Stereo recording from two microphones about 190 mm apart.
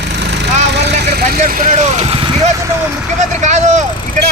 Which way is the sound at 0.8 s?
55° right (ahead or behind).